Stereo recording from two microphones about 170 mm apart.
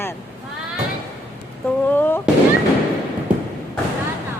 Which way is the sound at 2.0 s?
10° left (ahead or behind).